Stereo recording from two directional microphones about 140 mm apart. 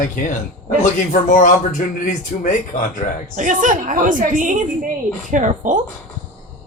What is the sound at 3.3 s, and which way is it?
A woman's voice, 65° right (ahead or behind).